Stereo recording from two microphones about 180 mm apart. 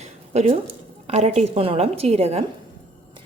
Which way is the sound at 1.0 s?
35° right (ahead or behind).